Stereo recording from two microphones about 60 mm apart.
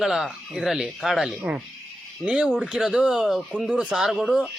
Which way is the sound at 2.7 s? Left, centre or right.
Centre.